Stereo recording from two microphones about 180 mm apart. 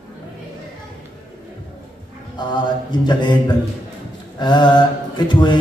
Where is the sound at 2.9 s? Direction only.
25° left (ahead or behind).